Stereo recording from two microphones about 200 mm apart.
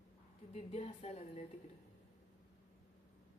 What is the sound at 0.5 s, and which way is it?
Speech, 30° left (ahead or behind).